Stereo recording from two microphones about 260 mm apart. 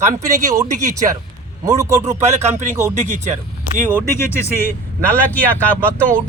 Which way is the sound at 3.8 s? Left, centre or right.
Centre.